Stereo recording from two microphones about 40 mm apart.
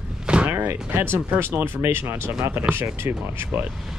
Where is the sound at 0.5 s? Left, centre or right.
Right.